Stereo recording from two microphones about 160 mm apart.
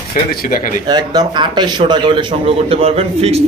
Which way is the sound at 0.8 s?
25° right (ahead or behind).